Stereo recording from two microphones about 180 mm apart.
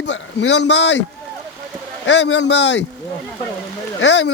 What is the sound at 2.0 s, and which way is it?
Speech, 85° left.